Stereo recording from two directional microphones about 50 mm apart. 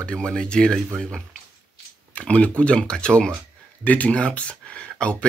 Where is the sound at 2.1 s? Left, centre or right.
Left.